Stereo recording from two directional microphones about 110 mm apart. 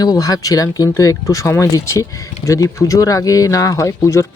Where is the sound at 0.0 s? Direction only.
35° left (ahead or behind).